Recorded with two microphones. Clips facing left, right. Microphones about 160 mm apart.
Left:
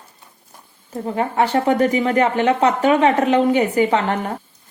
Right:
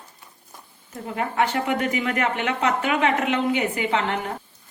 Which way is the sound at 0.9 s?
35° left (ahead or behind).